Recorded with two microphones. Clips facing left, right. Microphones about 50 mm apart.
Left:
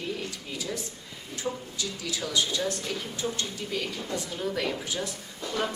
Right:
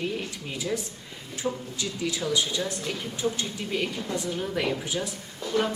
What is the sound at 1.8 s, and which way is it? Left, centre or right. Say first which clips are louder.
A woman's voice: right 4 dB; right.